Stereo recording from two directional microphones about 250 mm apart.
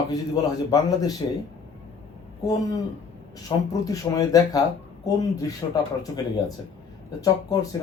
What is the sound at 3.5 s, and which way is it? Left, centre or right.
A man's voice, centre.